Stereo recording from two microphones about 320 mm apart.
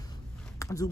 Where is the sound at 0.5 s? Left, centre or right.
Centre.